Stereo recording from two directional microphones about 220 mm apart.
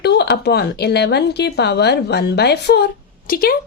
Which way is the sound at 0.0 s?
50° left (ahead or behind).